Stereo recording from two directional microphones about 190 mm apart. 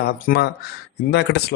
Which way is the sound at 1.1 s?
65° left (ahead or behind).